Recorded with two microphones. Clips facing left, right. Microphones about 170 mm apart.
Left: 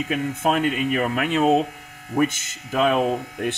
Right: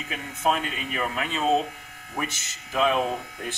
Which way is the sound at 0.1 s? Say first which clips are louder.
Left 3 dB; 55° left (ahead or behind).